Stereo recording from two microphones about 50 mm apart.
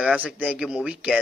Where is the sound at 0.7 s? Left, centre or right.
Centre.